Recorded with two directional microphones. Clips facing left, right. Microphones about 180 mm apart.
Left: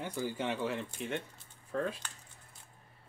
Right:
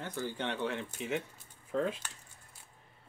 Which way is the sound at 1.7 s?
20° right (ahead or behind).